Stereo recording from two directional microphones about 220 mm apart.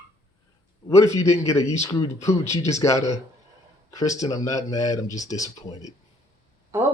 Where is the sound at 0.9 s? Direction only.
15° left (ahead or behind).